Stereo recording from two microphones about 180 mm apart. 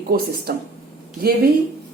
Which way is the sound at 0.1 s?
55° right (ahead or behind).